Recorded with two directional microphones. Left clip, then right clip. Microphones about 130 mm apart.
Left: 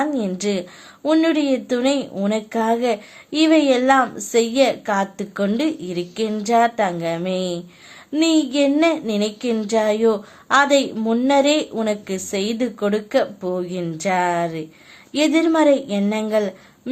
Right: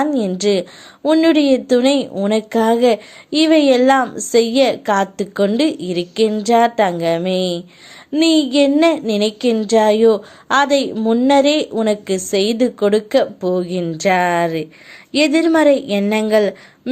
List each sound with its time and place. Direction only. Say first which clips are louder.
0.0 s a woman's voice: right 5 dB; 35° right (ahead or behind)
10.9 s a woman's voice: right 5 dB; 20° right (ahead or behind)
11.3 s a woman's voice: right 3 dB; 35° right (ahead or behind)